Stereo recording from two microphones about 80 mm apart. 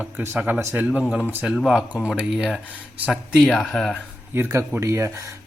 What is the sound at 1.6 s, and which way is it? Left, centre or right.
Speech, centre.